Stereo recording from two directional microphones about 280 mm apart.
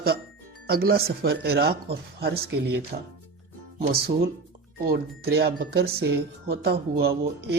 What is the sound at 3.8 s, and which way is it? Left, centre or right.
Speech, right.